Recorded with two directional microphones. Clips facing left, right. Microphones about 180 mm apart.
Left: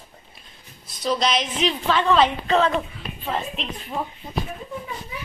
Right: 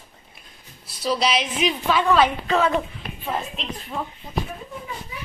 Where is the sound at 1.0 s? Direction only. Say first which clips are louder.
Even; 5° right (ahead or behind).